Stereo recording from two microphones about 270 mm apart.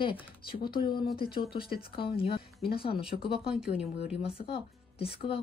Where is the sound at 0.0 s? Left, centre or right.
Centre.